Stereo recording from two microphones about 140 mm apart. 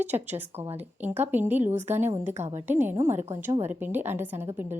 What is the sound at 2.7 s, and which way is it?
A woman's voice, 15° right (ahead or behind).